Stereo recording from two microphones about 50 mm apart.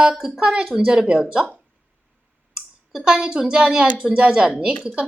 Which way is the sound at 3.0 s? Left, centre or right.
Centre.